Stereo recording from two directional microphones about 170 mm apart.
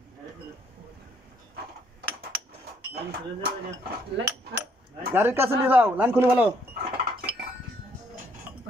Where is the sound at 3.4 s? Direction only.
70° right (ahead or behind).